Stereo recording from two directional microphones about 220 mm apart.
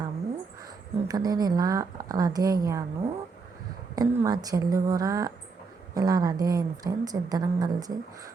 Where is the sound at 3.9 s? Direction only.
15° right (ahead or behind).